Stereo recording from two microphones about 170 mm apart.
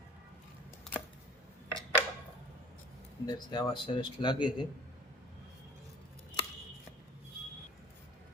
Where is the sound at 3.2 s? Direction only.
25° left (ahead or behind).